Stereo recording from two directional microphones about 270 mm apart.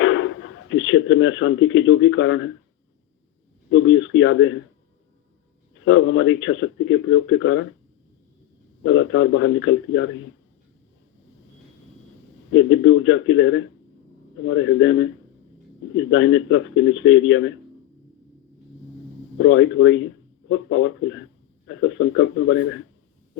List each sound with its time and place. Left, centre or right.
0.0 s speech: left
3.7 s speech: left
5.8 s speech: left
8.8 s speech: left
12.5 s speech: left
19.4 s speech: left